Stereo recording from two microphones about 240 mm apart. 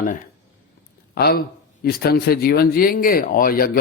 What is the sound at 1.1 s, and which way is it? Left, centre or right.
Speech, left.